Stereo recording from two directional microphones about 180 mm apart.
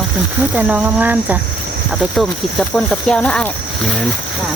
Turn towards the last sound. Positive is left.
turn(degrees=5)  # may be behind; listen again after turning